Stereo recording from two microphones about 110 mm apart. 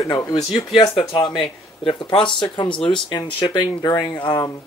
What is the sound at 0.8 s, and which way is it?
Speech, 45° left (ahead or behind).